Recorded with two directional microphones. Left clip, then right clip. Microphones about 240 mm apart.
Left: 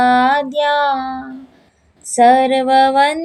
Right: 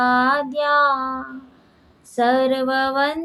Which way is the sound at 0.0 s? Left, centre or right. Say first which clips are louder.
Left 5 dB; left.